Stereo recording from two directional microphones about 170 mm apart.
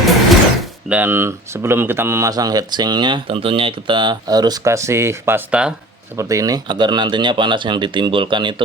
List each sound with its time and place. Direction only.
0.9 s speech: 10° right (ahead or behind)
6.1 s speech: 20° right (ahead or behind)